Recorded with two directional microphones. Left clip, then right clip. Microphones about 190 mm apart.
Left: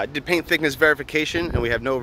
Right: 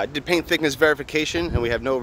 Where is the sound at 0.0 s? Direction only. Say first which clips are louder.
Even; centre (ahead or behind).